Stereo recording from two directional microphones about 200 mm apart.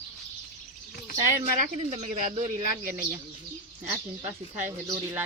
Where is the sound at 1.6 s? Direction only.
35° right (ahead or behind).